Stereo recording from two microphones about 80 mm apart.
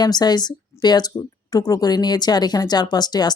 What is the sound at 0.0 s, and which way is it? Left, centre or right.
Speech, left.